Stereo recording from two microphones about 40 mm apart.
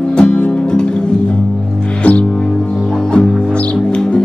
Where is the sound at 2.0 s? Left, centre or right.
Left.